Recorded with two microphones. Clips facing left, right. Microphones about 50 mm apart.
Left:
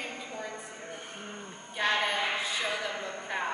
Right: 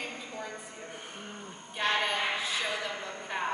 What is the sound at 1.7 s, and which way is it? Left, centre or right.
Speech, centre.